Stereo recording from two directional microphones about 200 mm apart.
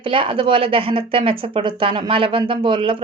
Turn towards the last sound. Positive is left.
turn(degrees=-25)  # may be behind; listen again after turning